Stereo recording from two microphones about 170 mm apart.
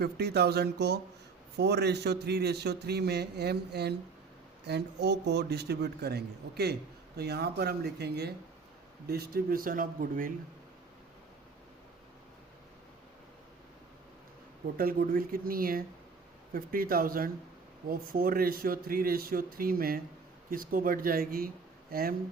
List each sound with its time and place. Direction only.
0.0 s a man's voice: 75° right (ahead or behind); by 10.3 s 55° right (ahead or behind)
14.8 s speech: 60° right (ahead or behind)